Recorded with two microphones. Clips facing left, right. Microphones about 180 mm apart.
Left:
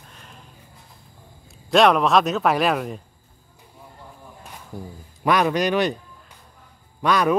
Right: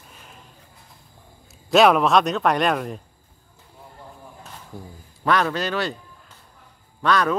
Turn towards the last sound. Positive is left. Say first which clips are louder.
# left 2 dB
turn(degrees=10)  # may be behind; listen again after turning